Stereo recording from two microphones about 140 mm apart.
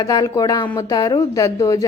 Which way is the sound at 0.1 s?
25° left (ahead or behind).